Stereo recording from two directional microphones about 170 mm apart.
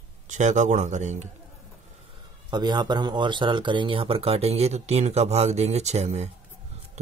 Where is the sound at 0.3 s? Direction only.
45° right (ahead or behind).